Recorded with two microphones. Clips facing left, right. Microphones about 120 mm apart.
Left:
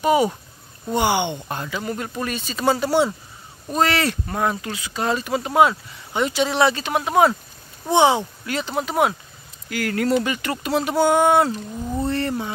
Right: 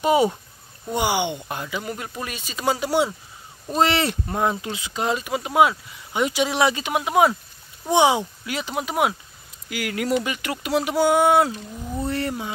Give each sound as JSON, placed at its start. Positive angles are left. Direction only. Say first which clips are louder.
{"t": 0.0, "sound": "speech", "louder": "left 1 dB", "side_deg": -25}
{"t": 0.9, "sound": "speech", "louder": "left 2 dB", "side_deg": -10}
{"t": 3.7, "sound": "speech", "louder": "even", "side_deg": -25}